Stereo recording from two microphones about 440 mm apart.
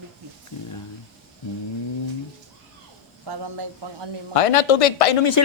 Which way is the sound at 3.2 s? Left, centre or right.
Right.